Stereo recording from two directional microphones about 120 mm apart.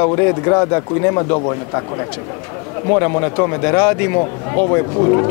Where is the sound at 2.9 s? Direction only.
20° left (ahead or behind).